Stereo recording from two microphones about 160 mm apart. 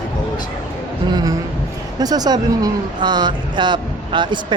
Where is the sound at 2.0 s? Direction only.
25° right (ahead or behind).